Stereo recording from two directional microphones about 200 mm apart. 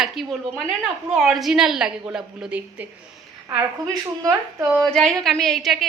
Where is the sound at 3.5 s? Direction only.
15° right (ahead or behind).